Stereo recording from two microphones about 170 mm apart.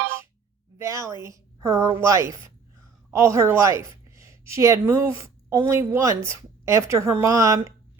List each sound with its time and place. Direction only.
0.8 s a woman's voice: 20° right (ahead or behind)